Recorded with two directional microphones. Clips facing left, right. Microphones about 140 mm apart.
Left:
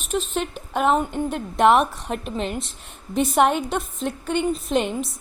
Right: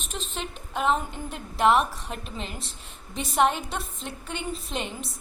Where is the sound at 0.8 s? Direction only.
60° left (ahead or behind).